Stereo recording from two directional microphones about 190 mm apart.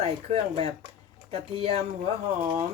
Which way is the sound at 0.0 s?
30° right (ahead or behind).